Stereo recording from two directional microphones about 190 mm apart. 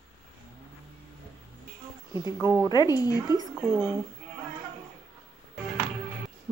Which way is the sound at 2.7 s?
20° left (ahead or behind).